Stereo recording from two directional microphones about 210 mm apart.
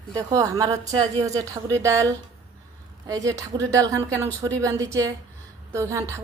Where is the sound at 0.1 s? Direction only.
15° right (ahead or behind).